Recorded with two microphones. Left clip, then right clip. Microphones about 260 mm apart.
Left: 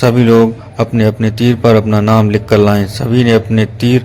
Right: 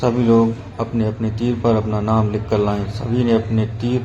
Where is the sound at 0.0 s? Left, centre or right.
Left.